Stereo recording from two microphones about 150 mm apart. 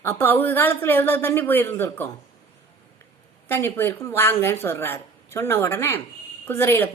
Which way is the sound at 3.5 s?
15° left (ahead or behind).